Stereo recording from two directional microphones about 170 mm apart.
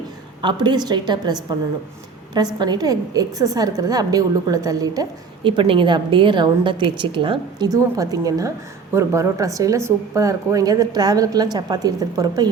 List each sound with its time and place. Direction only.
0.4 s a woman's voice: 25° right (ahead or behind)
2.6 s a woman's voice: 25° right (ahead or behind)